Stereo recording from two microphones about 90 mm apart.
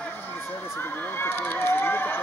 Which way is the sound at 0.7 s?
25° left (ahead or behind).